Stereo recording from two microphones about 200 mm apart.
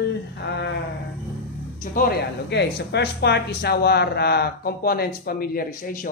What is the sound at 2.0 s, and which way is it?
Speech, 55° left (ahead or behind).